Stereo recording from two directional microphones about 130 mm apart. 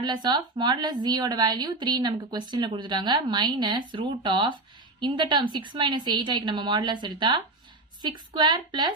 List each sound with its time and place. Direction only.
0.0 s a woman's voice: 35° right (ahead or behind)